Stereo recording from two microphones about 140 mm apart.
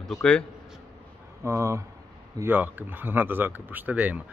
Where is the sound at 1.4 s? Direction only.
20° right (ahead or behind).